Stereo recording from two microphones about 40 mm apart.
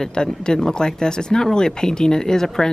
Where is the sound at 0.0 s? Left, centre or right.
Centre.